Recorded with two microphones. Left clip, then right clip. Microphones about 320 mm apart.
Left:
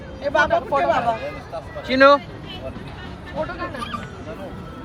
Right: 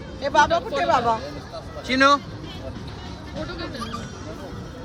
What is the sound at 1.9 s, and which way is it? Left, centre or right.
Speech, centre.